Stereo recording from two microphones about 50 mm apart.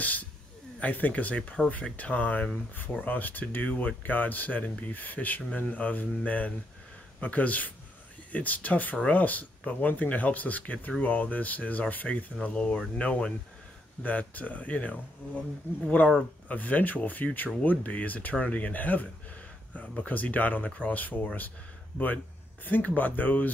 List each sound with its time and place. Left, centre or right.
0.0 s speech: left
12.4 s speech: left
15.7 s speech: left
16.4 s speech: left